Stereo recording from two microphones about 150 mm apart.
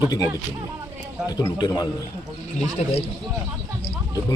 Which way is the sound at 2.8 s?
50° left (ahead or behind).